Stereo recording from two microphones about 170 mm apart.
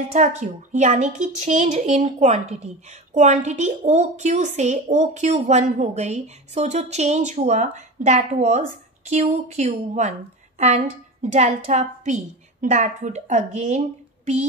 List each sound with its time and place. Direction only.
0.1 s a woman's voice: 45° right (ahead or behind)
11.3 s a woman's voice: 40° right (ahead or behind)